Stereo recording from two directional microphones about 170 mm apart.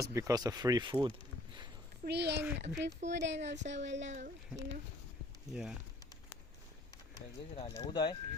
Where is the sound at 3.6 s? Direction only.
50° right (ahead or behind).